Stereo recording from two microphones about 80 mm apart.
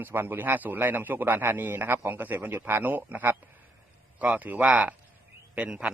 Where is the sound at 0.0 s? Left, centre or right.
Right.